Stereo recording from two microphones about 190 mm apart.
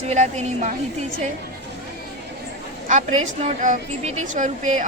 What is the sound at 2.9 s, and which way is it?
A woman's voice, 40° right (ahead or behind).